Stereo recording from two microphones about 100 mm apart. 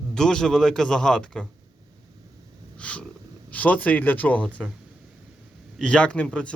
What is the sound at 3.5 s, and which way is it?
Speech, 15° left (ahead or behind).